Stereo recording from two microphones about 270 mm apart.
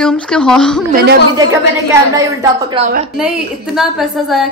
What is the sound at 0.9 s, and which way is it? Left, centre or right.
Speech, right.